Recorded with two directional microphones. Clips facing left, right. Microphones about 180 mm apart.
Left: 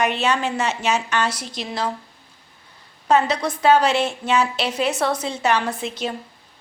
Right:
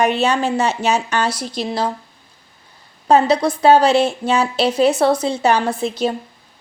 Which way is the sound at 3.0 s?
30° right (ahead or behind).